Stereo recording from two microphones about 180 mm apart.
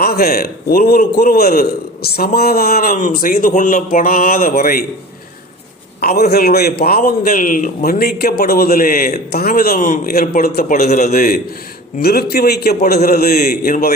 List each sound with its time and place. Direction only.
0.0 s a man's voice: 55° left (ahead or behind)
6.0 s a man's voice: 60° left (ahead or behind)
10.8 s a man's voice: 40° left (ahead or behind)
11.1 s a man's voice: 55° left (ahead or behind)